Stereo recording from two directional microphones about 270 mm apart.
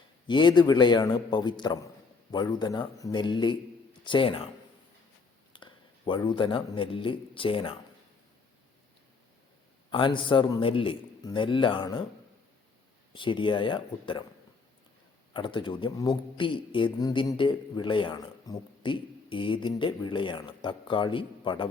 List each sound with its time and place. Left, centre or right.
0.3 s a man's voice: centre
5.5 s a man's voice: centre
9.9 s a man's voice: centre
13.1 s a man's voice: centre
15.3 s a man's voice: centre